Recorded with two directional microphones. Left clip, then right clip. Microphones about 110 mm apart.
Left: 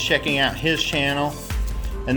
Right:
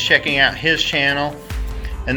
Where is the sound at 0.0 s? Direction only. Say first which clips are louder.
Right 5 dB; 15° left (ahead or behind).